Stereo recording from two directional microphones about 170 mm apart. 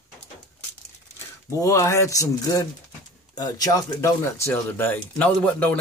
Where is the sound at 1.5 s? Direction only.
20° left (ahead or behind).